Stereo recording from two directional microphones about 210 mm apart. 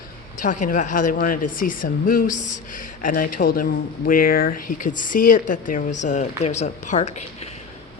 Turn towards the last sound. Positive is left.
turn(degrees=30)  # may be behind; listen again after turning